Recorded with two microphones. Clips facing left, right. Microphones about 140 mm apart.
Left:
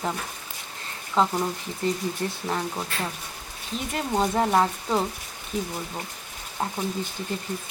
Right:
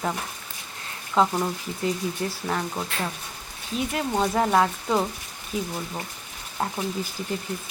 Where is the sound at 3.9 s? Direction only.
Centre (ahead or behind).